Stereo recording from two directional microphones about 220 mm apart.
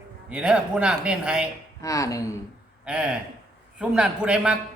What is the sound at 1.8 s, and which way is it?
Speech, 15° left (ahead or behind).